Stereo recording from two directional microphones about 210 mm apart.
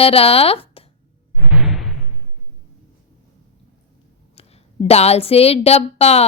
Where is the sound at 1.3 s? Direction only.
5° right (ahead or behind).